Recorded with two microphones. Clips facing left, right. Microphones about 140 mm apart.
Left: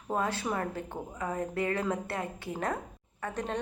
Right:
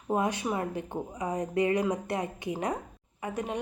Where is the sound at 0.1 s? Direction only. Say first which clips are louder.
Right 3 dB; 15° right (ahead or behind).